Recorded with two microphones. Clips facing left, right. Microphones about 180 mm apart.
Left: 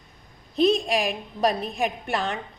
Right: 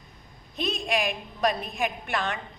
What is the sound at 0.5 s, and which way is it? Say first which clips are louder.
A woman's voice: left 8 dB; 35° left (ahead or behind).